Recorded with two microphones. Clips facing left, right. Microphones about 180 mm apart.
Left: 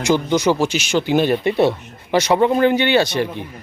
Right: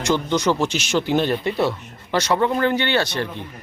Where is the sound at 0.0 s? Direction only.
5° left (ahead or behind).